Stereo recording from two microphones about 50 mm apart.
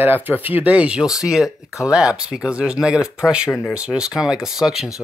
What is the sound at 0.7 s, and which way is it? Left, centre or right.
Speech, right.